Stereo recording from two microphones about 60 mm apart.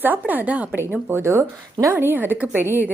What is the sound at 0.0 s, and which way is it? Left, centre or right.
Speech, right.